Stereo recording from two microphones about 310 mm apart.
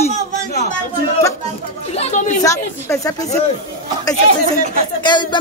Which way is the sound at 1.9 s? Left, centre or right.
Left.